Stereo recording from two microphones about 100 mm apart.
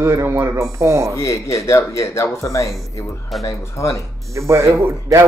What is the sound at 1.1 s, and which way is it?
Speech, 30° left (ahead or behind).